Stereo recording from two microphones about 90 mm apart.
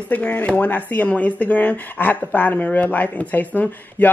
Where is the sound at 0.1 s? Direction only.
20° left (ahead or behind).